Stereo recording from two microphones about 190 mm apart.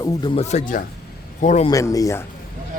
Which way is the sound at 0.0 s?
20° left (ahead or behind).